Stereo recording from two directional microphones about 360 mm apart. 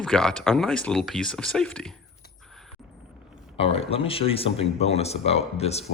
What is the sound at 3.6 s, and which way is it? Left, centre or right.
Speech, centre.